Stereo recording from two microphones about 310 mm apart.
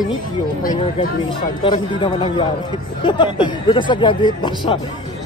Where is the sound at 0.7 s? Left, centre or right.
Centre.